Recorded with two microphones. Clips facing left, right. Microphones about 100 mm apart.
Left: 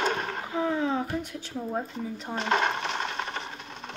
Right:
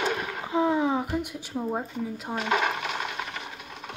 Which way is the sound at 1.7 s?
5° right (ahead or behind).